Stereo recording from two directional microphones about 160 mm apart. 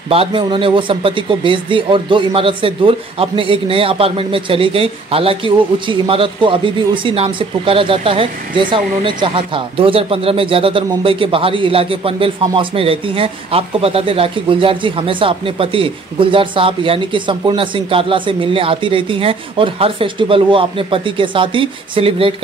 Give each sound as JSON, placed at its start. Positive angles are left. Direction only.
{"t": 0.1, "sound": "speech", "side_deg": -35}